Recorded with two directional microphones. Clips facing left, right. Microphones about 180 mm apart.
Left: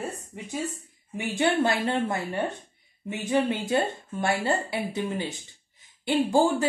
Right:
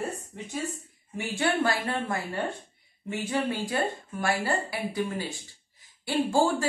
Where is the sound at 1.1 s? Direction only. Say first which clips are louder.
Left 3 dB; 20° left (ahead or behind).